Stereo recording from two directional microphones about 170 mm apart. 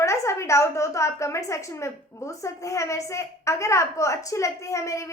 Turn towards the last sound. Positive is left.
turn(degrees=20)  # may be behind; listen again after turning